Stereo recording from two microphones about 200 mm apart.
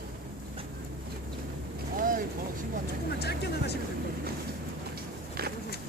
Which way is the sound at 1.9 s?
45° right (ahead or behind).